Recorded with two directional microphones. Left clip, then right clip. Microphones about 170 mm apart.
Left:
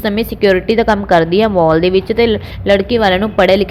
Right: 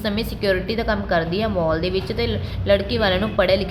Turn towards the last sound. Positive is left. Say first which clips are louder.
# left 8 dB
turn(degrees=40)  # may be behind; listen again after turning